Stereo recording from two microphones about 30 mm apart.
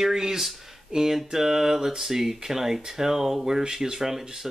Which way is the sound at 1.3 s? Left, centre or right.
Centre.